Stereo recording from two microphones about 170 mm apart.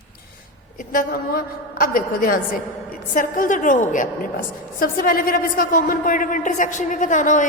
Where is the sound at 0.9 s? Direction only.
60° left (ahead or behind).